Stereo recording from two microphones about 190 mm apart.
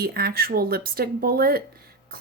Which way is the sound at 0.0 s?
55° right (ahead or behind).